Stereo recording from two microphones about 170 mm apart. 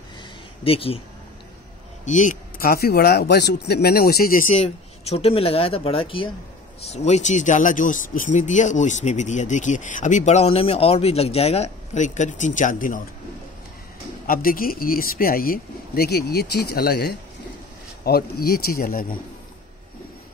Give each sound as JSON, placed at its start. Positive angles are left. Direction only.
{"t": 0.7, "sound": "speech", "side_deg": 35}
{"t": 2.0, "sound": "speech", "side_deg": 45}
{"t": 14.2, "sound": "speech", "side_deg": 60}